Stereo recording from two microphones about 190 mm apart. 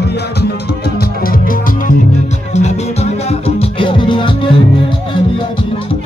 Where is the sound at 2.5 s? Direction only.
35° left (ahead or behind).